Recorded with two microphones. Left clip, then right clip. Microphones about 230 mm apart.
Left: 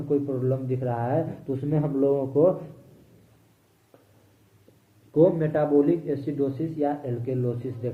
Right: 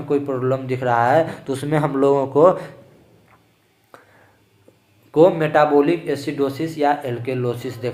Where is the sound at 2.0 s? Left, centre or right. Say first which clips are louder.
Right 7 dB; right.